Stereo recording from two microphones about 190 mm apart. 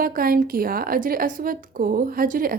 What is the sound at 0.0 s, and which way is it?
A woman's voice, 50° right (ahead or behind).